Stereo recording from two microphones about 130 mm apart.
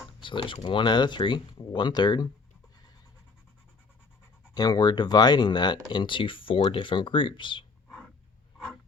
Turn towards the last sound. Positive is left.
turn(degrees=40)  # may be behind; listen again after turning